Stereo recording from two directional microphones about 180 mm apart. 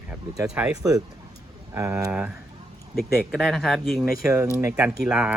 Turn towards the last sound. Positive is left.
turn(degrees=-5)  # may be behind; listen again after turning